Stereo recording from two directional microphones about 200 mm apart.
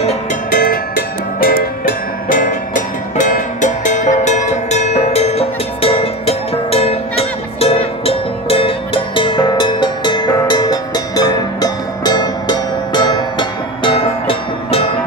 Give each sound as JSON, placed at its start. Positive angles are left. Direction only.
{"t": 0.0, "sound": "music", "side_deg": 35}